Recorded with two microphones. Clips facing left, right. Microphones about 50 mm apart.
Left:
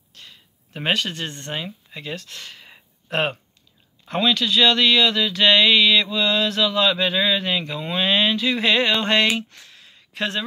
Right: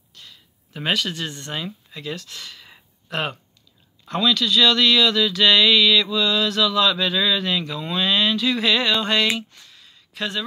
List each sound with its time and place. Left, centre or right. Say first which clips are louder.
0.7 s speech: even; left
1.5 s speech: even; centre
3.1 s speech: left 3 dB; left
4.1 s speech: even; left
8.9 s a sound: left 1 dB; left
9.4 s speech: left 2 dB; left
9.7 s a sound: left 2 dB; left